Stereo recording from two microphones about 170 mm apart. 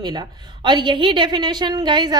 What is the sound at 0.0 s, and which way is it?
A woman's voice, 25° right (ahead or behind).